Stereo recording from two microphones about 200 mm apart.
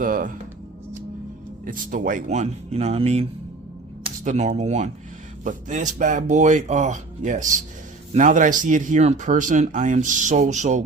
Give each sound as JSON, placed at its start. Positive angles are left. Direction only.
{"t": 0.0, "sound": "speech", "side_deg": -40}
{"t": 1.6, "sound": "speech", "side_deg": -40}